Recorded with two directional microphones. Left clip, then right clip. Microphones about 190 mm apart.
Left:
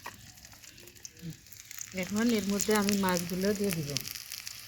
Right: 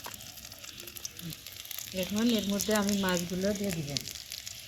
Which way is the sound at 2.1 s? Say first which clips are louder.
Left 1 dB; 30° left (ahead or behind).